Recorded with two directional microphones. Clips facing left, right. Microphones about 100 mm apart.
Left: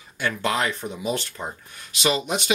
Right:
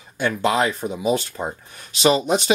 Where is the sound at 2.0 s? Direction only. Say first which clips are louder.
Right 6 dB; 35° right (ahead or behind).